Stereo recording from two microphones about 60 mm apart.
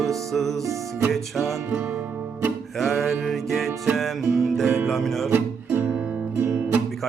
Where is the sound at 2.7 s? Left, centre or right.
Centre.